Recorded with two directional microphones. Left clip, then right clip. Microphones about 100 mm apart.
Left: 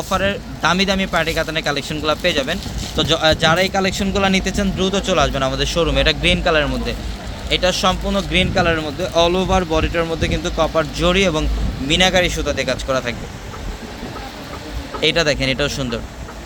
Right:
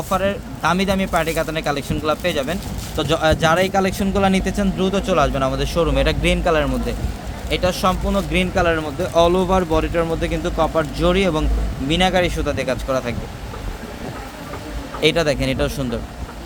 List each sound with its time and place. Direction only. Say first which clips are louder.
0.1 s speech: left 1 dB; centre (ahead or behind)
3.0 s speech: left 2 dB; 10° right (ahead or behind)
10.6 s speech: left 1 dB; 15° left (ahead or behind); by 13.1 s 5° right (ahead or behind)
15.0 s speech: left 1 dB; 5° right (ahead or behind)